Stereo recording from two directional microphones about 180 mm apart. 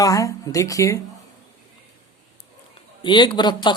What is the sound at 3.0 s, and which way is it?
Speech, 25° left (ahead or behind).